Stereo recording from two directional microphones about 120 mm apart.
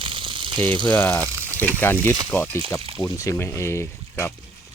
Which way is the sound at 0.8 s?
10° left (ahead or behind).